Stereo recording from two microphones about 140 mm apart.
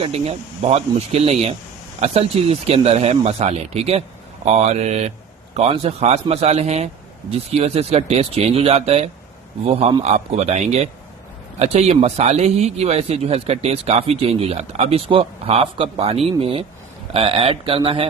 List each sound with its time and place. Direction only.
0.0 s speech: 45° right (ahead or behind)